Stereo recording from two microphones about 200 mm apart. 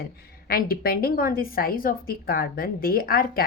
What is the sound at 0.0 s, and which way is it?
A woman's voice, 45° left (ahead or behind).